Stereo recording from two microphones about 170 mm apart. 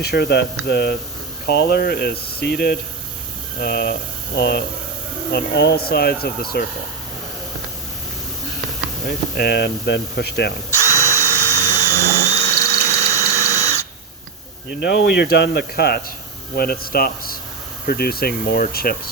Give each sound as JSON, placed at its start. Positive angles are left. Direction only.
{"t": 0.0, "sound": "speech", "side_deg": 70}
{"t": 9.0, "sound": "speech", "side_deg": 65}
{"t": 10.7, "sound": "drill", "side_deg": 20}
{"t": 12.5, "sound": "a sound", "side_deg": 20}
{"t": 14.7, "sound": "speech", "side_deg": 70}